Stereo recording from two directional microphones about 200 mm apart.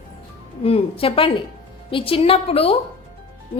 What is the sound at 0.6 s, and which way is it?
A woman's voice, 30° left (ahead or behind).